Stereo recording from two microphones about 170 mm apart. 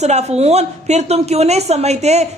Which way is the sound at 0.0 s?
40° right (ahead or behind).